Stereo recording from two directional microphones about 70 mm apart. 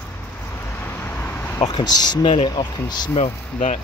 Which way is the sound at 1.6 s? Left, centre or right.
Left.